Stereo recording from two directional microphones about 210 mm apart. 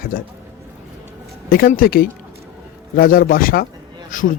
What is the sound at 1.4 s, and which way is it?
Speech, 45° left (ahead or behind).